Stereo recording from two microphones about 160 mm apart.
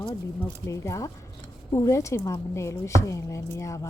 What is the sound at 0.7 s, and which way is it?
A woman's voice, 20° left (ahead or behind).